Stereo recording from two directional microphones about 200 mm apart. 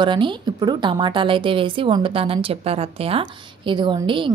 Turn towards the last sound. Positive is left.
turn(degrees=-25)  # may be behind; listen again after turning